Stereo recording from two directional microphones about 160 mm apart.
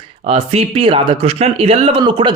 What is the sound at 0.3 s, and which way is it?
A man's voice, 40° right (ahead or behind).